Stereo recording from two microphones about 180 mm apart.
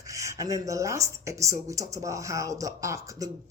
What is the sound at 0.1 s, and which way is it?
Speech, 20° right (ahead or behind).